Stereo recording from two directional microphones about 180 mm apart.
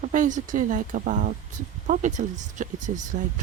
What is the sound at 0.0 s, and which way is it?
Speech, 45° right (ahead or behind).